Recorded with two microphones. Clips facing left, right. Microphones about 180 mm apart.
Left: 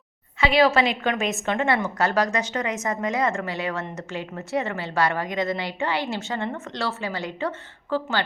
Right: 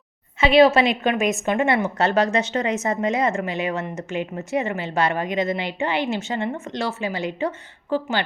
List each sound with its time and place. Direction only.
0.3 s speech: 25° right (ahead or behind)